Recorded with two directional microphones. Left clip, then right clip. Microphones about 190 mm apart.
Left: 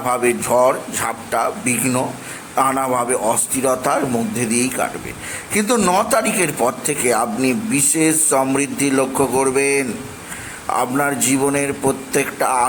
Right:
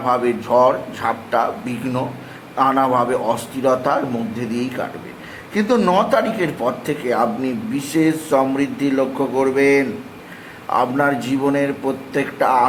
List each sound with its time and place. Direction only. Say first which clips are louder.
0.0 s a man's voice: even; 15° left (ahead or behind)